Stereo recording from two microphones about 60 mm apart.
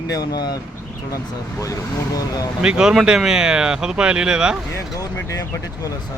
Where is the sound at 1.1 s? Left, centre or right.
Left.